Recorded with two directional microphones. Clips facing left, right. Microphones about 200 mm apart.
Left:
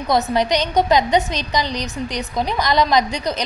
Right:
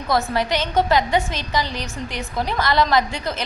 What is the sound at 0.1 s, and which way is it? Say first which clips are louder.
A woman's voice: left 3 dB; 20° left (ahead or behind).